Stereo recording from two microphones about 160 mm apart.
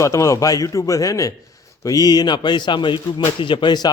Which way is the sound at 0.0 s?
20° left (ahead or behind).